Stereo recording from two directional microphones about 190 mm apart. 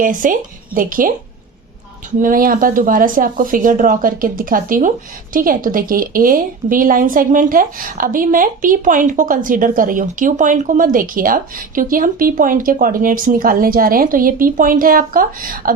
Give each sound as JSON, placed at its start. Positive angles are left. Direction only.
{"t": 0.0, "sound": "a woman's voice", "side_deg": -45}